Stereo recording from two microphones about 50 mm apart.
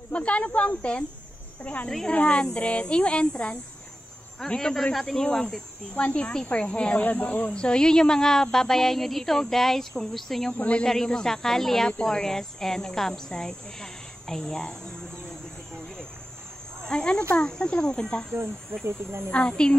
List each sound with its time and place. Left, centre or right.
0.1 s speech: left
7.5 s speech: centre
10.6 s speech: left
10.9 s speech: centre
15.2 s a sound: centre
16.8 s speech: centre
18.3 s speech: right
19.3 s speech: centre